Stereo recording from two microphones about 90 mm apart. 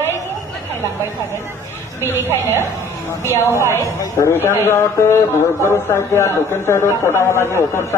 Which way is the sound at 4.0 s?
30° left (ahead or behind).